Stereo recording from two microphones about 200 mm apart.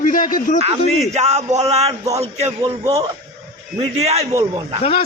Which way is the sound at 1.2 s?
35° right (ahead or behind).